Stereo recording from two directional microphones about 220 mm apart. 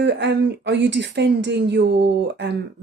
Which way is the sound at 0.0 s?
55° right (ahead or behind).